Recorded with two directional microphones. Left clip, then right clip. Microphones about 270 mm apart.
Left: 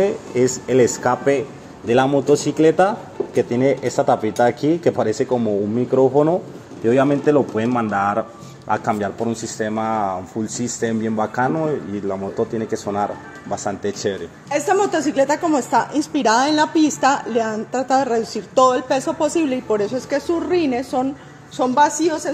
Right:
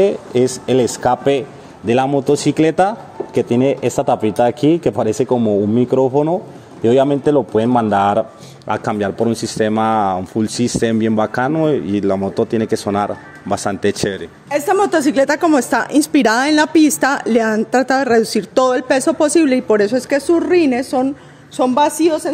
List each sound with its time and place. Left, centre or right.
0.0 s speech: right
3.3 s speech: right
3.8 s speech: right
4.6 s speech: right
4.9 s speech: right
8.7 s speech: right
9.3 s speech: right
10.8 s speech: right
11.2 s speech: right